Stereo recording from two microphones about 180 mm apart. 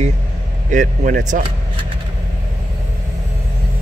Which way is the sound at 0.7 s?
45° right (ahead or behind).